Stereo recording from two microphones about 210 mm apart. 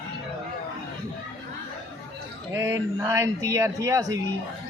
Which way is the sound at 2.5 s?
10° right (ahead or behind).